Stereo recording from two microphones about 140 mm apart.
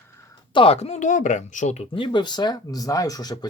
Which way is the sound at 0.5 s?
40° left (ahead or behind).